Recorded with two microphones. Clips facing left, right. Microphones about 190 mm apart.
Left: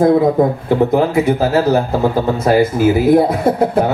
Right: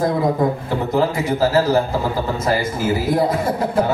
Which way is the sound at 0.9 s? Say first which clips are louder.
Left 5 dB; 60° left (ahead or behind).